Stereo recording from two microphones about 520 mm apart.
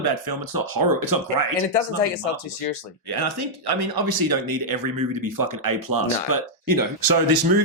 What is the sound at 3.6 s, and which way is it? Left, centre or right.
Speech, right.